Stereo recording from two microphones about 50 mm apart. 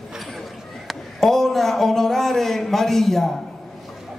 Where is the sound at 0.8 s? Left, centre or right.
Centre.